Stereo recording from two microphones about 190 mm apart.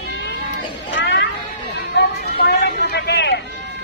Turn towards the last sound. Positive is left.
turn(degrees=65)  # may be behind; listen again after turning